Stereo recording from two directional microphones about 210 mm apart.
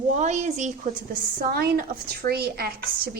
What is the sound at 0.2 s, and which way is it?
A woman's voice, 35° right (ahead or behind).